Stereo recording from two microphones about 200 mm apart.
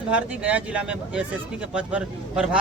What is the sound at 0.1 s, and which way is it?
A man's voice, 5° right (ahead or behind).